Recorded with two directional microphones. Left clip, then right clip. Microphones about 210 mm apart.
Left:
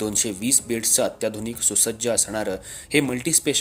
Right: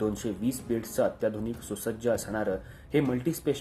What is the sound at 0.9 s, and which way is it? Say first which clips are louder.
Speech: left 2 dB; 25° left (ahead or behind).